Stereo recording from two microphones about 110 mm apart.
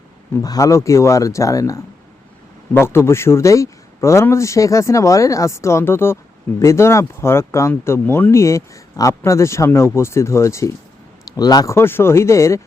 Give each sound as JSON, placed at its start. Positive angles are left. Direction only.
{"t": 0.4, "sound": "speech", "side_deg": 35}